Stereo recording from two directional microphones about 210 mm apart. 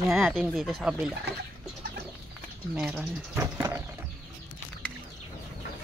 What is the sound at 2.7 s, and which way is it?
Speech, 5° right (ahead or behind).